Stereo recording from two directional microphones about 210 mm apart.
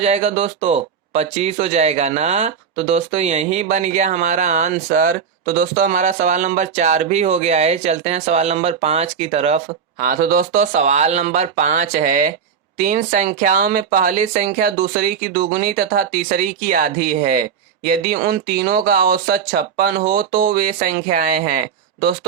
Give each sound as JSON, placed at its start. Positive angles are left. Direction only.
{"t": 0.0, "sound": "speech", "side_deg": -30}
{"t": 10.0, "sound": "speech", "side_deg": -45}